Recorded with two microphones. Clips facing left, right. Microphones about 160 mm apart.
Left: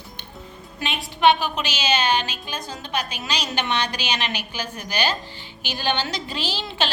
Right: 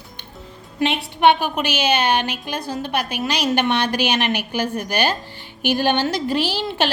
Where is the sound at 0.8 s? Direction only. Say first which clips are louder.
Right 5 dB; 65° right (ahead or behind).